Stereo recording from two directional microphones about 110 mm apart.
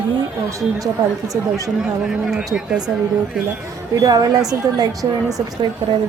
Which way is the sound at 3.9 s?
35° right (ahead or behind).